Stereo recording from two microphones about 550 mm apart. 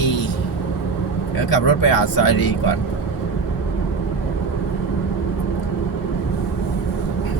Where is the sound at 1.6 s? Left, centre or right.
Left.